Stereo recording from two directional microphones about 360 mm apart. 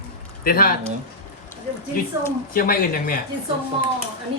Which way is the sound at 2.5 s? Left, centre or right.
Left.